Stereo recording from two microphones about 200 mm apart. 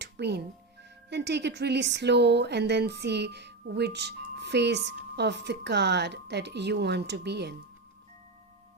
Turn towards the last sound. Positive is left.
turn(degrees=-55)  # may be behind; listen again after turning